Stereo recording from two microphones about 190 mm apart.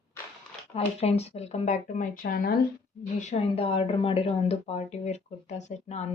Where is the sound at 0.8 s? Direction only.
35° left (ahead or behind); by 2.5 s 50° left (ahead or behind).